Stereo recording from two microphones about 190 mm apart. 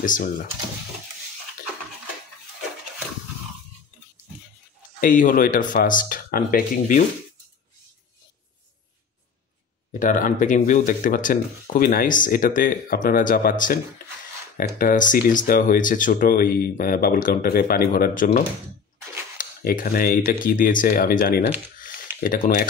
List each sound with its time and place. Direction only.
0.0 s speech: 45° left (ahead or behind)
5.0 s speech: 45° left (ahead or behind)
9.9 s speech: 45° left (ahead or behind)
19.3 s a sound: 45° left (ahead or behind)
20.4 s speech: 45° left (ahead or behind)
21.7 s a sound: 45° left (ahead or behind)